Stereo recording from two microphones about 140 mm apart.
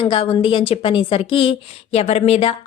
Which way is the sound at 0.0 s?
40° left (ahead or behind).